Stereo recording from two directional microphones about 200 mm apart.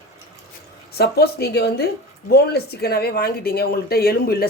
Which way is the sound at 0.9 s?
55° left (ahead or behind).